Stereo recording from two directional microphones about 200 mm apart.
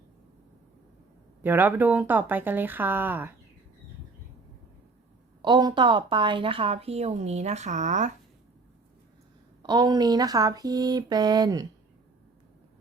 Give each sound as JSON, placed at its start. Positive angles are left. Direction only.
{"t": 1.4, "sound": "speech", "side_deg": -10}
{"t": 5.4, "sound": "a woman's voice", "side_deg": -20}
{"t": 9.6, "sound": "a woman's voice", "side_deg": -20}